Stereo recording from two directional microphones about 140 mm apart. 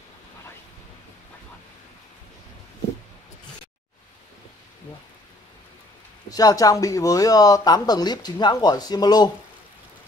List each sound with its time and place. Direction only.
6.3 s speech: 25° left (ahead or behind)